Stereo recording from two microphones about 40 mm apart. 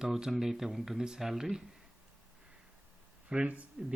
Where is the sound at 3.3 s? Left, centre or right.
Right.